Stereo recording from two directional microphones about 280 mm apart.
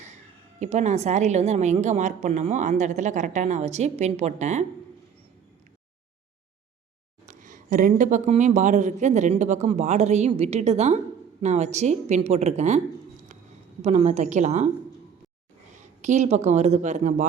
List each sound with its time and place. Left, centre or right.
0.6 s speech: right
7.3 s speech: right
13.8 s speech: right
15.7 s speech: right